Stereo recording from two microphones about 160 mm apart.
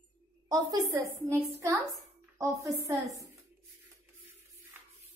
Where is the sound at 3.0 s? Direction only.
Centre (ahead or behind).